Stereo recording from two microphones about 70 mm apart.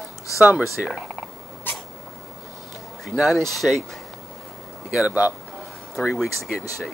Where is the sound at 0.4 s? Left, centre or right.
Centre.